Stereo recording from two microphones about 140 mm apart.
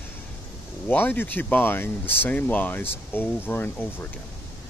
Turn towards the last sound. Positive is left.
turn(degrees=15)  # may be behind; listen again after turning